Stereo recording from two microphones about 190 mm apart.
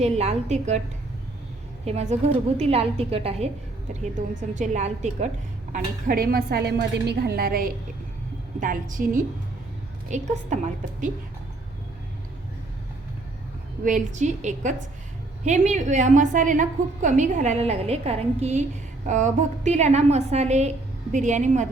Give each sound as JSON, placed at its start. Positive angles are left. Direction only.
{"t": 0.0, "sound": "a woman's voice", "side_deg": -35}
{"t": 1.8, "sound": "a woman's voice", "side_deg": -35}
{"t": 5.7, "sound": "a woman's voice", "side_deg": -50}
{"t": 13.8, "sound": "a woman's voice", "side_deg": -40}